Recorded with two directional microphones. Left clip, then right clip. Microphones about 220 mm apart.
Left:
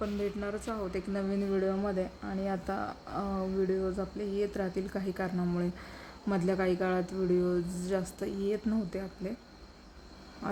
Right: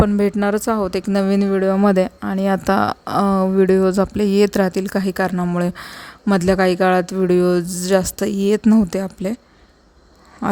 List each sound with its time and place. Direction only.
0.0 s speech: 45° right (ahead or behind)